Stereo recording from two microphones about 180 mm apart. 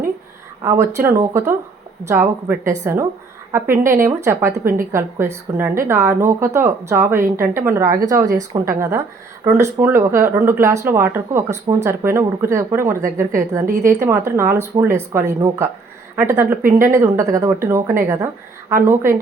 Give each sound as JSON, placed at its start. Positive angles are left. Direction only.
{"t": 0.6, "sound": "speech", "side_deg": -15}
{"t": 9.4, "sound": "speech", "side_deg": -15}